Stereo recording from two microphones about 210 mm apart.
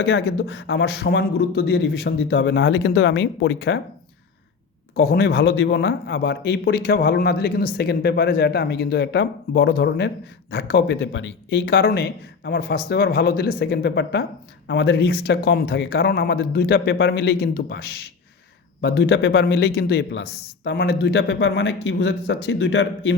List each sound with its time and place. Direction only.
0.0 s a man's voice: 50° left (ahead or behind)
4.9 s a man's voice: 50° left (ahead or behind)